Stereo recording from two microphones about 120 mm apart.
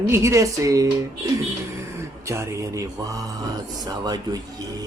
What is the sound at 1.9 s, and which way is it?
Speech, 25° right (ahead or behind).